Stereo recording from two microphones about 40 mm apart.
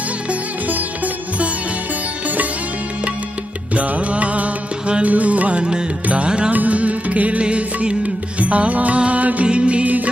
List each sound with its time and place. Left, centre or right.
0.7 s music: right
3.7 s music: right
6.5 s music: right
9.5 s music: right